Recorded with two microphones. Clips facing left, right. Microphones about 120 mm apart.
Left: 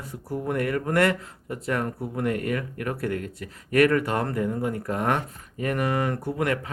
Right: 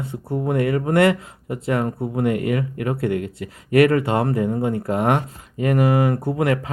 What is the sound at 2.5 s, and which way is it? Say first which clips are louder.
Speech: right 6 dB; 15° right (ahead or behind).